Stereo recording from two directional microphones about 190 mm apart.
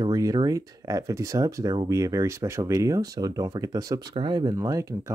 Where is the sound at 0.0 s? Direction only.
20° right (ahead or behind).